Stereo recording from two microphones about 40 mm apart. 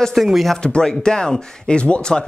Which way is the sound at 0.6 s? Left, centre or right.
Left.